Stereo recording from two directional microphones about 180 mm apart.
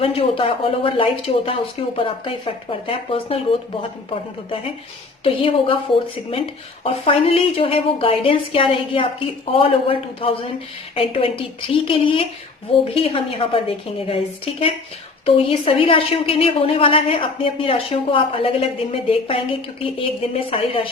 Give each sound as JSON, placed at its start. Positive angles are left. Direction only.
{"t": 0.0, "sound": "a woman's voice", "side_deg": 30}
{"t": 5.2, "sound": "a woman's voice", "side_deg": 30}
{"t": 15.4, "sound": "a woman's voice", "side_deg": 30}